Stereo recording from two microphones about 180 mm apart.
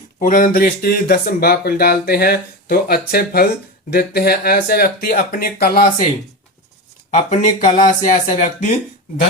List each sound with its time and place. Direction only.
0.2 s speech: 50° left (ahead or behind)
7.1 s speech: 40° left (ahead or behind)